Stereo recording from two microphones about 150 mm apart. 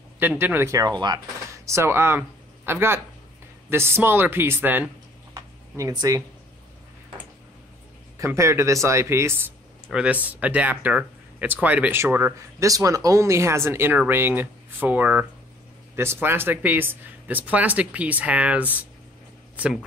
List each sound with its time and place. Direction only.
0.2 s speech: 10° right (ahead or behind); by 1.2 s 30° right (ahead or behind)
1.7 s speech: 15° right (ahead or behind)
5.3 s a sound: 25° right (ahead or behind)
8.2 s speech: 20° right (ahead or behind)
9.8 s speech: 5° right (ahead or behind)